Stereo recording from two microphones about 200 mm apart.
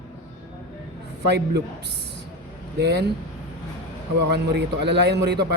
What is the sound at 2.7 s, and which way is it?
Speech, 55° right (ahead or behind).